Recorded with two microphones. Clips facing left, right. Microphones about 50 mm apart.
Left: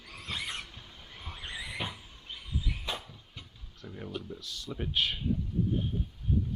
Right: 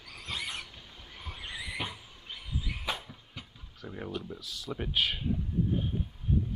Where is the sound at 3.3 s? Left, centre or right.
Centre.